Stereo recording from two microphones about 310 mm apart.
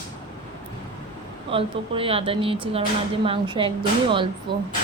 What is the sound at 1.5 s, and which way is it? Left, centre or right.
Speech, centre.